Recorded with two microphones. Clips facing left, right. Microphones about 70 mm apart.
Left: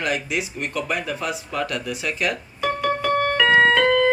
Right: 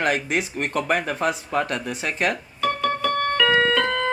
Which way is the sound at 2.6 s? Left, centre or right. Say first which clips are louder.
Left 1 dB; centre.